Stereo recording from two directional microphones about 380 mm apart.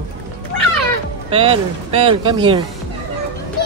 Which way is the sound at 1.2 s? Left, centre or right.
Centre.